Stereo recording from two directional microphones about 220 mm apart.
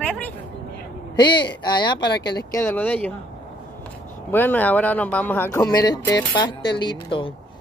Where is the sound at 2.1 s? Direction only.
50° left (ahead or behind).